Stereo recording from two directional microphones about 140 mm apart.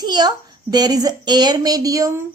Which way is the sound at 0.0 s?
30° right (ahead or behind).